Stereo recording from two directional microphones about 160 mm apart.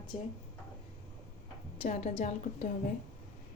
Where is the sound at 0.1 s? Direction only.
45° left (ahead or behind).